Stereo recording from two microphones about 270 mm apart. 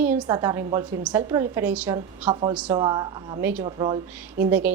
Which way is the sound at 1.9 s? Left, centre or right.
Centre.